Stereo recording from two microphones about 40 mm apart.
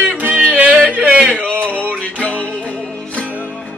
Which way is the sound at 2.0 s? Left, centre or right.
Left.